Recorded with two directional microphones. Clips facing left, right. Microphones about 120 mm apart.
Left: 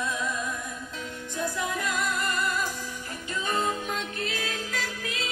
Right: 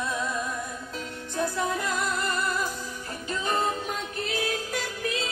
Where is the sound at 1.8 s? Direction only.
25° right (ahead or behind).